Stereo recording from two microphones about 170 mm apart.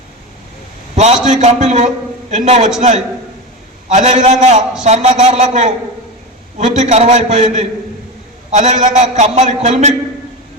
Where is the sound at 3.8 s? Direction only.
45° right (ahead or behind).